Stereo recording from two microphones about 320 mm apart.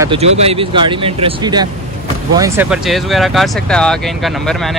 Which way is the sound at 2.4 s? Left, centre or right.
Centre.